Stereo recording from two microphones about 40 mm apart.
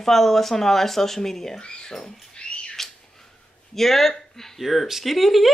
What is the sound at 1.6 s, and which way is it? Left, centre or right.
Rodents, centre.